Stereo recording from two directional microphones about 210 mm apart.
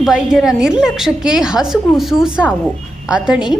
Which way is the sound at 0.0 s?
Centre (ahead or behind).